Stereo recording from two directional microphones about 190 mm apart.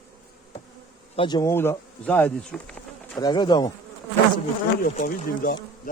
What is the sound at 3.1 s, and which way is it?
Speech, 20° left (ahead or behind).